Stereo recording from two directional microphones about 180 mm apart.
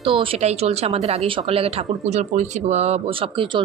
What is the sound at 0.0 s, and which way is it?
Speech, 30° right (ahead or behind).